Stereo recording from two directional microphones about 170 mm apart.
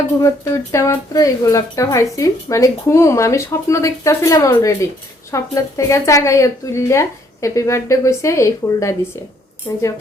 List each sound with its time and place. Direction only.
0.2 s speech: 15° left (ahead or behind)